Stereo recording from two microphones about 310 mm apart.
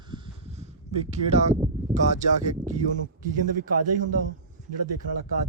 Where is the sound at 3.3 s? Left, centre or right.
Right.